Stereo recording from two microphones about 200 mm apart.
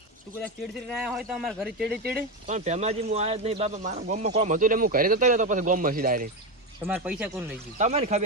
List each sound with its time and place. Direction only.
0.9 s speech: 5° right (ahead or behind)
2.1 s speech: 35° right (ahead or behind)
6.8 s speech: 10° right (ahead or behind)
7.8 s speech: 35° right (ahead or behind)